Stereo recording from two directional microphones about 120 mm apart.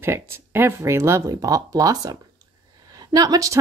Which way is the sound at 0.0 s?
20° right (ahead or behind).